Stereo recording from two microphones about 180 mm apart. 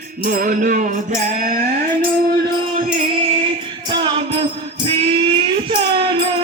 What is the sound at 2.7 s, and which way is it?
Music, 45° right (ahead or behind).